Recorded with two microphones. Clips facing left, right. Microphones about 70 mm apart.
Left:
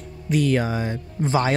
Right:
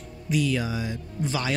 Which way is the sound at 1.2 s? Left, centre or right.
Left.